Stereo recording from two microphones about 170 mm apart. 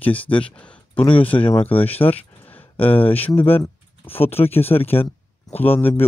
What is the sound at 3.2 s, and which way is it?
Speech, 10° left (ahead or behind).